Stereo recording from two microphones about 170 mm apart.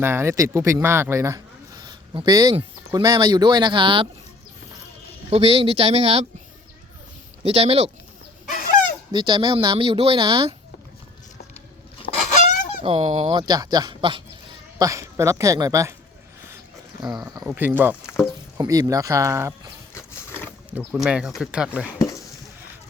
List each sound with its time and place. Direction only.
0.0 s speech: 15° right (ahead or behind); by 4.1 s 30° right (ahead or behind)
5.3 s speech: 35° right (ahead or behind)
7.4 s speech: 35° right (ahead or behind)
8.4 s a sound: 50° left (ahead or behind)
9.1 s speech: 30° right (ahead or behind)
12.1 s goose: 70° left (ahead or behind)
12.8 s speech: 35° right (ahead or behind)
13.3 s speech: 25° right (ahead or behind)
17.0 s speech: centre (ahead or behind)
18.5 s speech: 20° right (ahead or behind)
19.9 s a sound: 15° left (ahead or behind)
20.7 s speech: 10° right (ahead or behind)